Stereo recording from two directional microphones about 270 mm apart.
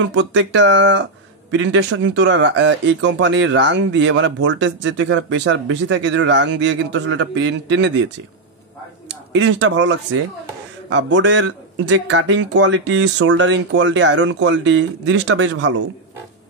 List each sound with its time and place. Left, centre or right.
0.0 s a man's voice: right
9.3 s a man's voice: right